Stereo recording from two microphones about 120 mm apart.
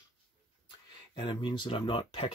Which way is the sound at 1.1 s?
40° left (ahead or behind).